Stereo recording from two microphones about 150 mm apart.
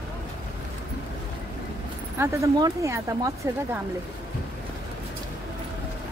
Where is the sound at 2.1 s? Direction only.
20° right (ahead or behind).